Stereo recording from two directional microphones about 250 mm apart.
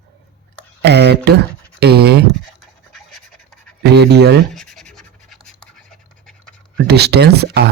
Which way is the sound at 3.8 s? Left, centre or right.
Right.